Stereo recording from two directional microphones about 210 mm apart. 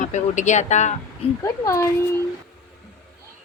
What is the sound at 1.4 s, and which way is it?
Speech, 15° left (ahead or behind).